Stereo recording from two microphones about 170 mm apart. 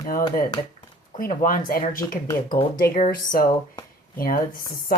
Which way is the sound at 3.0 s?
55° left (ahead or behind).